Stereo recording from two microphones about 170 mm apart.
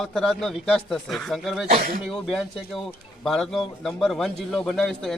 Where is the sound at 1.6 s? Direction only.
60° right (ahead or behind).